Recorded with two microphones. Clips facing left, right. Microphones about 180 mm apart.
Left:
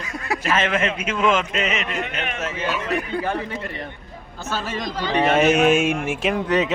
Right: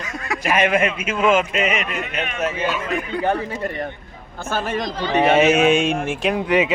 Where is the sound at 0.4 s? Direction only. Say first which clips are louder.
Right 4 dB; 15° right (ahead or behind).